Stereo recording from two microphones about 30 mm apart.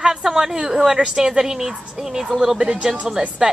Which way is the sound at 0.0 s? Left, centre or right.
Centre.